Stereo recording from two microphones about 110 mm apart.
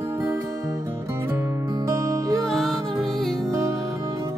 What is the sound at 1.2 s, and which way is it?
Music, 20° right (ahead or behind).